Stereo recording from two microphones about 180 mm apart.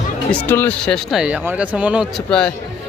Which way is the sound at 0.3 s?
10° left (ahead or behind).